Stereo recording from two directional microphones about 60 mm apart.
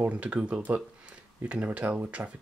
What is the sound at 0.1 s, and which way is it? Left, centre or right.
Speech, right.